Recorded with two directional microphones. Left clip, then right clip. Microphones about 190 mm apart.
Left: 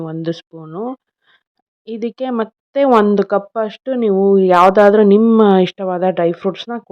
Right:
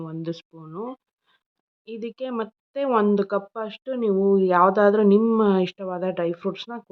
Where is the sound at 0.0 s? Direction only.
30° left (ahead or behind).